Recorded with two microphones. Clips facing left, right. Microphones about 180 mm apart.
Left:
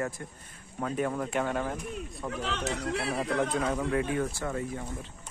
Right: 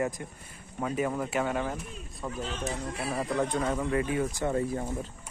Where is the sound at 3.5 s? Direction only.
Centre (ahead or behind).